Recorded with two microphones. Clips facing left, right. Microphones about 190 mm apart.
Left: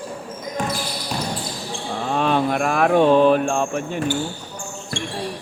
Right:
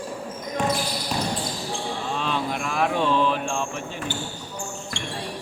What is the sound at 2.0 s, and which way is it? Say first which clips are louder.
Mantra: left 10 dB; 55° left (ahead or behind).